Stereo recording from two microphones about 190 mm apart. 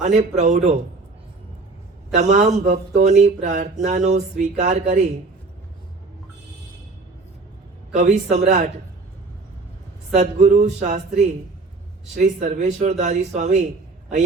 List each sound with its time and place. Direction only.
0.0 s speech: 40° right (ahead or behind)
2.1 s speech: 40° right (ahead or behind)
7.9 s speech: 40° right (ahead or behind)
10.2 s speech: 40° right (ahead or behind)